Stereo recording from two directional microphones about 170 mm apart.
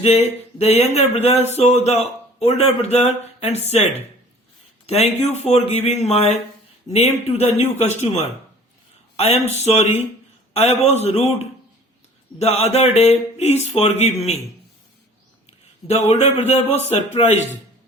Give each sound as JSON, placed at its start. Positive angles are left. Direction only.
{"t": 0.6, "sound": "a man's voice", "side_deg": 40}
{"t": 4.9, "sound": "a man's voice", "side_deg": 40}
{"t": 15.4, "sound": "a man's voice", "side_deg": 40}